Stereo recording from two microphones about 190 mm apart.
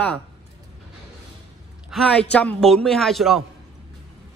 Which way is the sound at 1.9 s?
Centre (ahead or behind).